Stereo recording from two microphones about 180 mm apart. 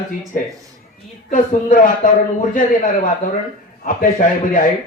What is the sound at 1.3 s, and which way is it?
A man's voice, 50° left (ahead or behind).